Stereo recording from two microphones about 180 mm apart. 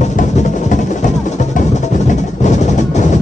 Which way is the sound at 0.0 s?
40° left (ahead or behind).